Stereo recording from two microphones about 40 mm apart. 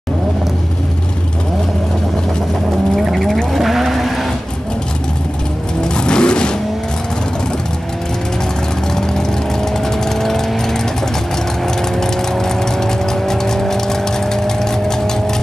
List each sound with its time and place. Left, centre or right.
3.5 s vehicle: centre
5.9 s vehicle: left
8.9 s vehicle: centre